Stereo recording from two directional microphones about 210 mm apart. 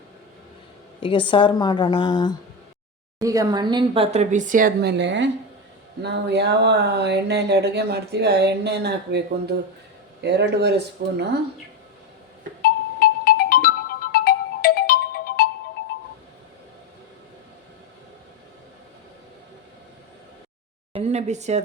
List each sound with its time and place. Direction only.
1.0 s a woman's voice: 25° left (ahead or behind)
3.2 s speech: 15° right (ahead or behind); by 9.2 s 55° right (ahead or behind)
10.2 s speech: 55° right (ahead or behind)
12.6 s music: 45° left (ahead or behind)
14.1 s ringtone: 45° left (ahead or behind)
20.9 s a sound: 30° right (ahead or behind)